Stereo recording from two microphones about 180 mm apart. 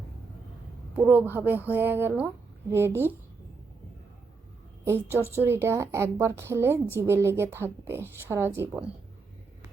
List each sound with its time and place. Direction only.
0.9 s a woman's voice: 10° right (ahead or behind)
4.9 s a woman's voice: 15° right (ahead or behind)